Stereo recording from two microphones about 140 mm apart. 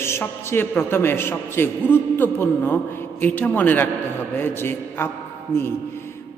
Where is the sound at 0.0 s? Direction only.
15° left (ahead or behind).